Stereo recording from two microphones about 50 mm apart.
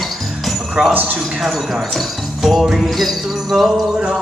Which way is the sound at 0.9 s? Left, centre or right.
Right.